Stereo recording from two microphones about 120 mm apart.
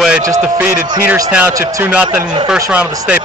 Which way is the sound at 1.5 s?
20° right (ahead or behind).